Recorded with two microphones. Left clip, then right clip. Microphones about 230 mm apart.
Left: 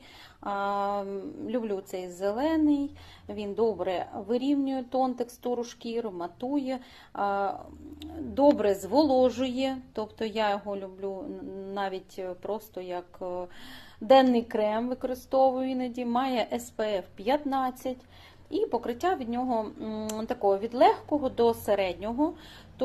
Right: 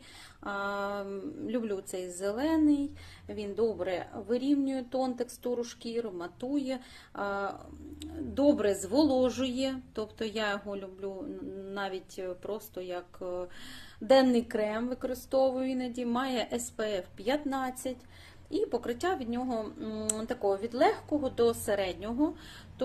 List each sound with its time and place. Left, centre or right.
0.4 s a woman's voice: centre